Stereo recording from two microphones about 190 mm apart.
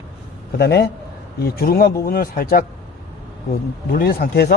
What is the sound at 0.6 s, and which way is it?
Speech, 60° left (ahead or behind).